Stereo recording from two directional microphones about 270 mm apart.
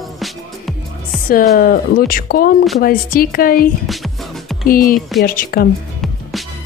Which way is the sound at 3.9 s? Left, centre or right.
Centre.